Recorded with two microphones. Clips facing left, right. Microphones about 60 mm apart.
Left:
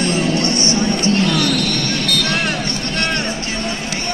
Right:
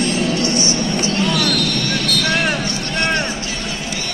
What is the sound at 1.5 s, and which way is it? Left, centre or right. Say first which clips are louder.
Vehicle: left 1 dB; left.